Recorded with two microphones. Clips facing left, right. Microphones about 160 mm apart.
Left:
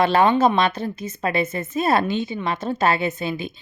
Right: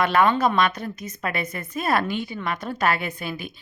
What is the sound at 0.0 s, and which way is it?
Speech, 30° left (ahead or behind).